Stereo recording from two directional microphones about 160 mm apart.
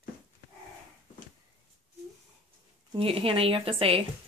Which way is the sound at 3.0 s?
35° right (ahead or behind).